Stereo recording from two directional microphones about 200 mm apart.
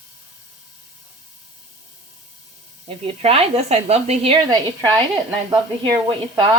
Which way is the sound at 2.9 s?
30° right (ahead or behind).